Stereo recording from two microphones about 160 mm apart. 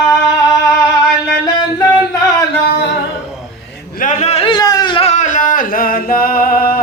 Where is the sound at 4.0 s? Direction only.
45° left (ahead or behind); by 6.8 s 65° left (ahead or behind).